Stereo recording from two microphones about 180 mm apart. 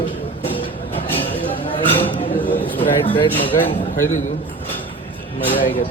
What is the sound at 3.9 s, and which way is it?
Speech, 45° left (ahead or behind).